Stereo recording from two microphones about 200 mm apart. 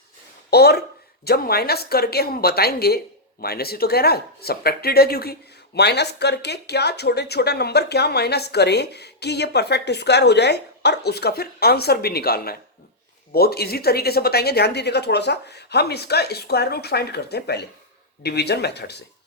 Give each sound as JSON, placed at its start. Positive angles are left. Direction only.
{"t": 0.5, "sound": "speech", "side_deg": 55}